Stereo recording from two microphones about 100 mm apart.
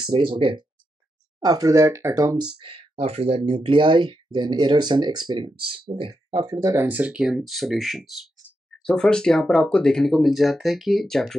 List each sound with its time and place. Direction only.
0.4 s speech: 60° right (ahead or behind)
1.4 s speech: 40° right (ahead or behind)
2.7 s speech: 75° right (ahead or behind); by 6.6 s 55° right (ahead or behind)
6.9 s speech: 15° right (ahead or behind); by 11.3 s 5° left (ahead or behind)